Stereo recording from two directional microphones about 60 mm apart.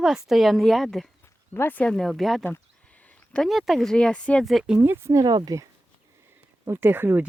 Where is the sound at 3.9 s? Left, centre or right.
Centre.